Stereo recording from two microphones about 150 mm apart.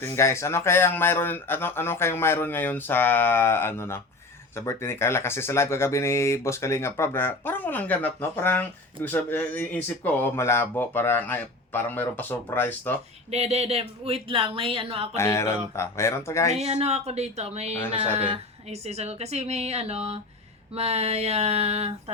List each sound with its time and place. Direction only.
0.0 s speech: 20° left (ahead or behind)
13.3 s speech: 45° right (ahead or behind)
15.1 s speech: 20° left (ahead or behind)
16.6 s a woman's voice: 45° right (ahead or behind)